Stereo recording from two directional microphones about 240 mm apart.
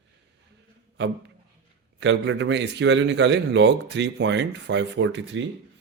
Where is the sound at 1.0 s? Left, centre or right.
Right.